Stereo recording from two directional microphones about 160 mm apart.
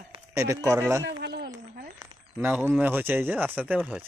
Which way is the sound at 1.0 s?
90° right.